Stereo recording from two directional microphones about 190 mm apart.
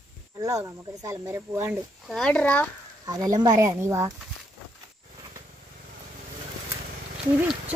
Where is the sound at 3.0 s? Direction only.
20° right (ahead or behind).